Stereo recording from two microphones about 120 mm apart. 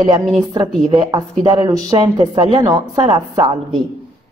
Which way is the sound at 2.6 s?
35° right (ahead or behind).